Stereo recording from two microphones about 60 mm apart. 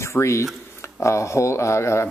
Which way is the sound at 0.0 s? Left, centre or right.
Left.